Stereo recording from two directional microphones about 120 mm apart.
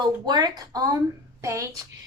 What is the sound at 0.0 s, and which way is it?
Child singing, 35° right (ahead or behind).